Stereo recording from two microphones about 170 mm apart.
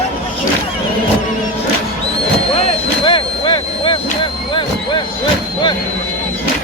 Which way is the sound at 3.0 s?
30° left (ahead or behind).